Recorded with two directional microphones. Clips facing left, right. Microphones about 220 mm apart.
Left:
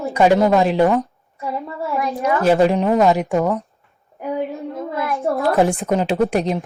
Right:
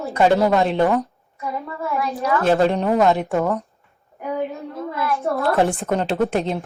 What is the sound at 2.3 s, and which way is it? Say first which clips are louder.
Speech: left 2 dB; 15° left (ahead or behind).